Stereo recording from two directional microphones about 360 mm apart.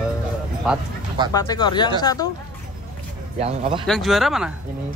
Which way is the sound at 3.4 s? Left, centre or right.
Centre.